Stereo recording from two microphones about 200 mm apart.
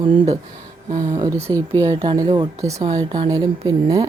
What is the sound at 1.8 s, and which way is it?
Speech, 20° right (ahead or behind).